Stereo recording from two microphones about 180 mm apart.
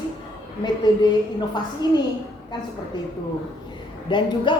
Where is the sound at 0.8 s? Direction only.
25° left (ahead or behind).